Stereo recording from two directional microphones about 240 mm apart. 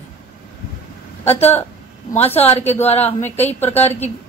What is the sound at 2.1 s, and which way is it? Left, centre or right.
A woman's voice, left.